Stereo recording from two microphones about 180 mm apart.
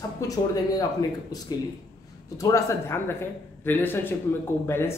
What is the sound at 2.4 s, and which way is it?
Speech, 15° left (ahead or behind).